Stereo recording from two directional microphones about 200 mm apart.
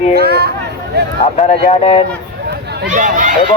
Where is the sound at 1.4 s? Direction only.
30° left (ahead or behind).